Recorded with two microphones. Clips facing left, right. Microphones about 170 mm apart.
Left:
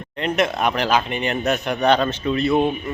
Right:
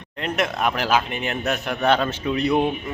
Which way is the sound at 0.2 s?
Centre (ahead or behind).